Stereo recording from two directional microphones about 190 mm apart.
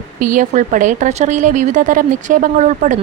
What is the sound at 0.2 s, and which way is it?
A woman's voice, 45° right (ahead or behind).